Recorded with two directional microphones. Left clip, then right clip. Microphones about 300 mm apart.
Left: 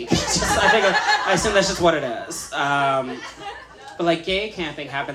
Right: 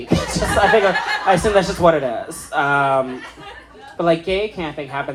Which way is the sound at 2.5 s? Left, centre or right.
Centre.